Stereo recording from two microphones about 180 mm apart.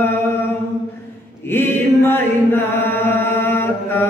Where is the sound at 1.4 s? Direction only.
10° left (ahead or behind).